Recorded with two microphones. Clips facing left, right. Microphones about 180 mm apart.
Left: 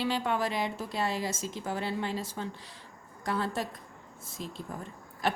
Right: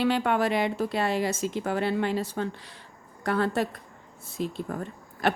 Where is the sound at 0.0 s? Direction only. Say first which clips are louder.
Right 6 dB; 65° right (ahead or behind).